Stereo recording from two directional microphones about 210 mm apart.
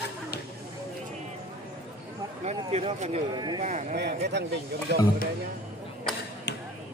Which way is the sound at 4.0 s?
55° right (ahead or behind).